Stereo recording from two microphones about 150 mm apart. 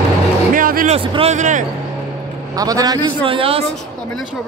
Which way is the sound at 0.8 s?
40° right (ahead or behind).